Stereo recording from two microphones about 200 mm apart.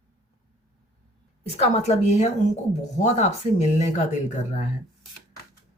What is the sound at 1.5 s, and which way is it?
Speech, 35° left (ahead or behind).